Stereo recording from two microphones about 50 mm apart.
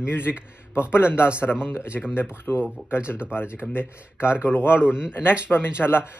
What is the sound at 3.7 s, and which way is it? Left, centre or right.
Speech, left.